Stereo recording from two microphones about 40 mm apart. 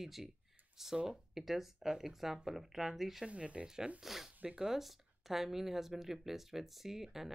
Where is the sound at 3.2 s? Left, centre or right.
Right.